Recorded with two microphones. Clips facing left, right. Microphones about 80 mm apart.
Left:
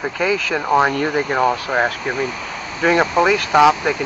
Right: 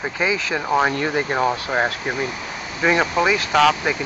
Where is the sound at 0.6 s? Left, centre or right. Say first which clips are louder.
Left 3 dB; centre.